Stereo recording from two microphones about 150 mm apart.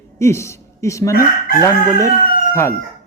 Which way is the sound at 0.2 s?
20° left (ahead or behind).